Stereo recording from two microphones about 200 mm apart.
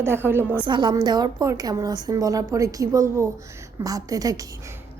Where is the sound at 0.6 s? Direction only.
25° right (ahead or behind).